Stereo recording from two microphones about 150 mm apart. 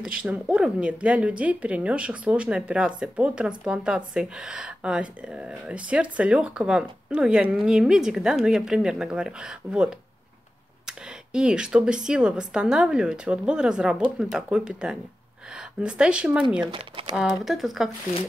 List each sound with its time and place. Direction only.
0.0 s a woman's voice: 5° right (ahead or behind)
16.6 s speech: 35° right (ahead or behind)
17.5 s speech: centre (ahead or behind)